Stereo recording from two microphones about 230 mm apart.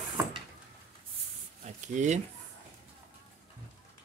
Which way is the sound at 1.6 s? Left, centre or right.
Right.